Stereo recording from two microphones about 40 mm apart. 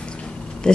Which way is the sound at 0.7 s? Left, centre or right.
Left.